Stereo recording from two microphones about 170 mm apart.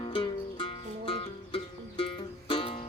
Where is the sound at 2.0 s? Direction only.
30° left (ahead or behind).